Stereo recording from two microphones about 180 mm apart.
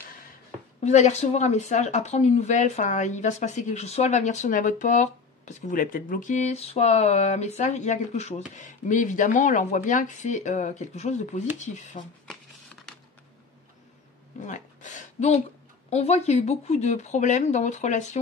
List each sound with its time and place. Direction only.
0.8 s speech: 40° left (ahead or behind)
14.4 s a sound: 45° left (ahead or behind)
15.9 s speech: 35° left (ahead or behind)